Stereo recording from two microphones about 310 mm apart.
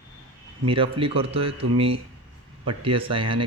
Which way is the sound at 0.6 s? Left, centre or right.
Centre.